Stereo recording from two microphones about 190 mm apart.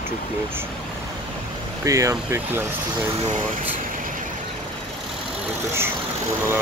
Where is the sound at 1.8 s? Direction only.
15° right (ahead or behind).